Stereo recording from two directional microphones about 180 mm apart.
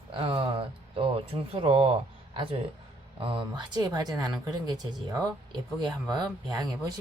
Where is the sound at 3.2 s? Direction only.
30° right (ahead or behind).